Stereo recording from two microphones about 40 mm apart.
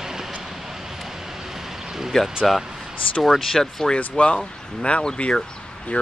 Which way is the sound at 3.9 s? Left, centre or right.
Left.